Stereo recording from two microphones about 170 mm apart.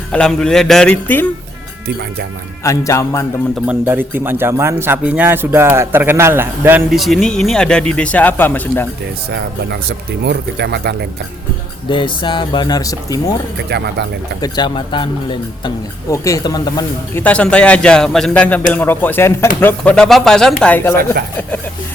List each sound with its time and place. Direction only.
0.1 s speech: 5° left (ahead or behind)
2.6 s speech: 20° left (ahead or behind)
3.5 s speech: 10° right (ahead or behind)
6.9 s speech: centre (ahead or behind)
9.3 s speech: 75° right (ahead or behind)
11.9 s speech: 30° left (ahead or behind)
13.7 s speech: 75° right (ahead or behind)
14.4 s speech: 25° left (ahead or behind)
17.2 s speech: 5° left (ahead or behind)